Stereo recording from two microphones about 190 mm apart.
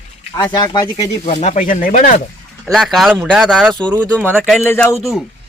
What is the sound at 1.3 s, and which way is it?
Speech, 35° left (ahead or behind).